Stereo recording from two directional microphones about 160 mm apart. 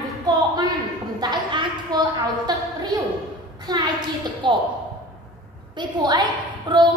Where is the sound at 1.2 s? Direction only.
25° right (ahead or behind).